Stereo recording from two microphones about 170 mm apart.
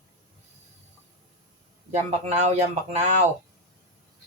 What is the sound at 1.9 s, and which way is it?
A man's voice, 40° right (ahead or behind).